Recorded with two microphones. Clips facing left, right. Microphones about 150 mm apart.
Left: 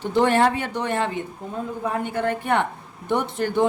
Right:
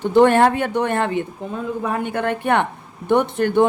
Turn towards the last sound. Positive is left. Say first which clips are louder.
# right 6 dB
turn(degrees=-60)  # may be behind; listen again after turning